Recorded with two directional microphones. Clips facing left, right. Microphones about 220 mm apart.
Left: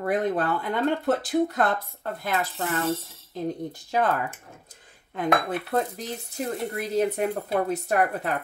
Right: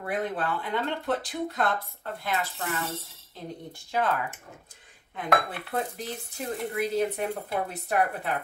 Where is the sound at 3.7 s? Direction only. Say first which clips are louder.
Right 1 dB; 40° left (ahead or behind).